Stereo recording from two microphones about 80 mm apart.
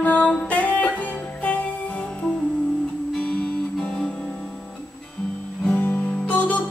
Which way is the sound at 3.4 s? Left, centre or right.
Centre.